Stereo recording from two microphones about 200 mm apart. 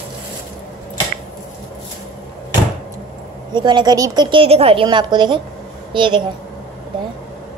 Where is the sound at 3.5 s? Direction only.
20° right (ahead or behind).